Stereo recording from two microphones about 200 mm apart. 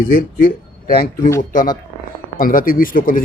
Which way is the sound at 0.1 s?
40° left (ahead or behind).